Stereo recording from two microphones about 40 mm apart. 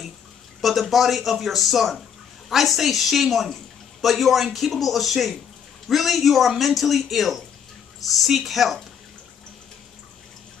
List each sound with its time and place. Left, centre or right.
0.6 s speech: centre
8.4 s speech: centre